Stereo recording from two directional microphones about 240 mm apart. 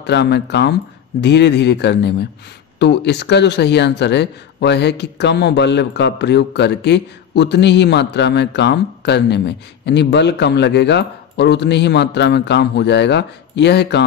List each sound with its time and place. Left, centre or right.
0.0 s speech: left